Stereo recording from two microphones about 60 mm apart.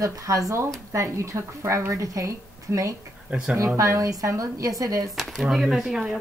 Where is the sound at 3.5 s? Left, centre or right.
Right.